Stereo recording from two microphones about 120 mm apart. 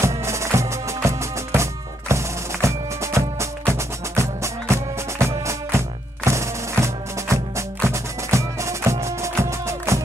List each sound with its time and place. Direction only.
0.0 s music: 25° right (ahead or behind)